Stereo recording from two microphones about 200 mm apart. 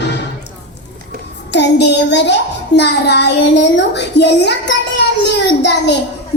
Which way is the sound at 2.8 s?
55° left (ahead or behind).